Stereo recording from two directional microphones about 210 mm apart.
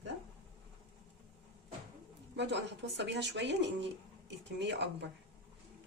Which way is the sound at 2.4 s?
55° right (ahead or behind).